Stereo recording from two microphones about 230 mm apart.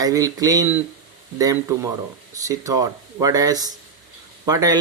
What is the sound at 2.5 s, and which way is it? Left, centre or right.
Speech, centre.